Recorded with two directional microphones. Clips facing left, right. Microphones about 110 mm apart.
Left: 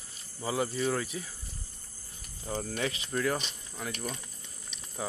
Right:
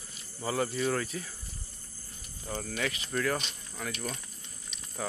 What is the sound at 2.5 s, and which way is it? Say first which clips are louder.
Speech: left 1 dB; 30° left (ahead or behind).